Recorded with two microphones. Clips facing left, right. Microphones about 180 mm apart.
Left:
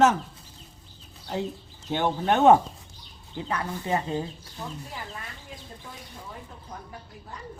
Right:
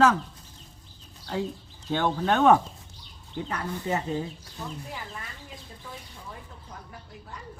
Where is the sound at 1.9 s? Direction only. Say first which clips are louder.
Left 1 dB; 15° left (ahead or behind).